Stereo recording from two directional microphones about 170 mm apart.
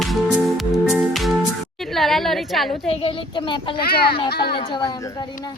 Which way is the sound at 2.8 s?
30° left (ahead or behind).